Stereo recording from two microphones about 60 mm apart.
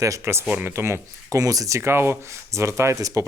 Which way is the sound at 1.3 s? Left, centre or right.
Right.